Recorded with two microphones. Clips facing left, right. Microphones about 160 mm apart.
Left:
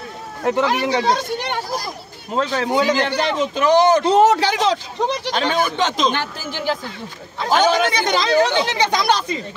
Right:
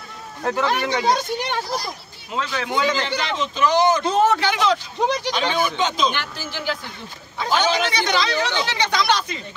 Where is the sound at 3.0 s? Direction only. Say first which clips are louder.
Left 5 dB; 50° left (ahead or behind).